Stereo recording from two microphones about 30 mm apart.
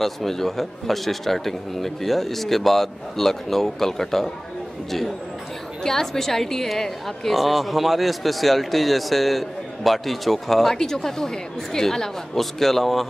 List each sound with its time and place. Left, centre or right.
0.0 s a man's voice: centre
5.9 s a man's voice: centre
7.3 s a man's voice: centre